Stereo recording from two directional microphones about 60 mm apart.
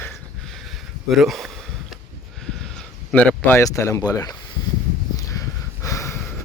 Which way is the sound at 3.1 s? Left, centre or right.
Left.